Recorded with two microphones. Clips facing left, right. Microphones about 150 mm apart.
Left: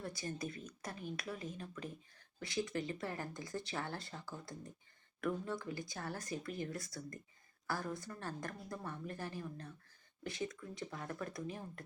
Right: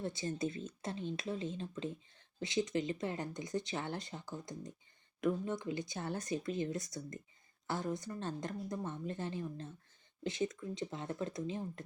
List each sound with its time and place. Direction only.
0.0 s speech: 25° right (ahead or behind)